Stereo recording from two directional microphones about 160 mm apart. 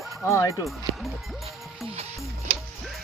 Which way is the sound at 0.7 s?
Centre (ahead or behind).